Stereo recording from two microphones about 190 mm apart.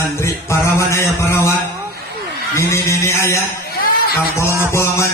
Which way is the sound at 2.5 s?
15° left (ahead or behind).